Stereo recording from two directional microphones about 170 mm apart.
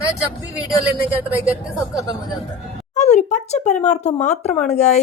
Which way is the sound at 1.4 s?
5° right (ahead or behind).